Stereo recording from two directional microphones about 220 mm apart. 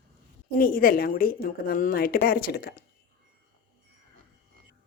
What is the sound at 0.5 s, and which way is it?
Speech, 40° left (ahead or behind).